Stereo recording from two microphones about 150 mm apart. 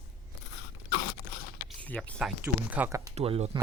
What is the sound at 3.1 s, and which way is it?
Speech, 45° right (ahead or behind).